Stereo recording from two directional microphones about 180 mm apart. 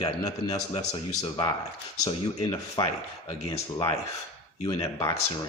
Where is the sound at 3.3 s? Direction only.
35° left (ahead or behind).